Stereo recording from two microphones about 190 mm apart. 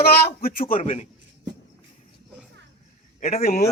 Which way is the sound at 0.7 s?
35° left (ahead or behind).